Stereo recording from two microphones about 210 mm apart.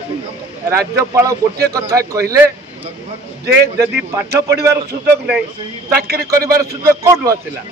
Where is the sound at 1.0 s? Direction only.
15° right (ahead or behind).